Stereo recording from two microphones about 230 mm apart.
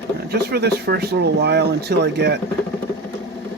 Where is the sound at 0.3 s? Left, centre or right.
Right.